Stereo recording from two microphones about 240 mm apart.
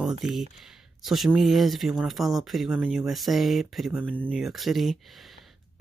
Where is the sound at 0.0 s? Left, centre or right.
Centre.